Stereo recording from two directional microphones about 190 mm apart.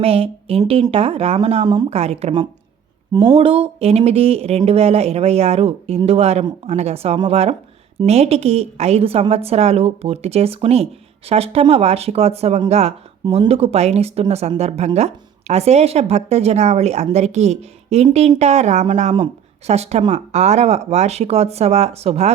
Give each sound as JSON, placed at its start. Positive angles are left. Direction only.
{"t": 0.0, "sound": "a woman's voice", "side_deg": -30}